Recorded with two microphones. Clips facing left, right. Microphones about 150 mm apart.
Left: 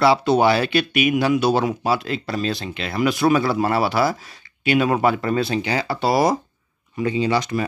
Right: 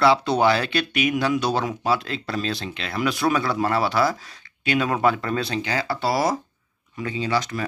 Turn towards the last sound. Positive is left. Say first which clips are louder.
# left 4 dB
turn(degrees=15)  # may be behind; listen again after turning